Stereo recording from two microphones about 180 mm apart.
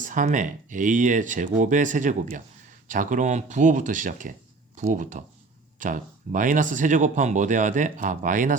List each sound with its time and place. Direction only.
0.0 s speech: 45° right (ahead or behind)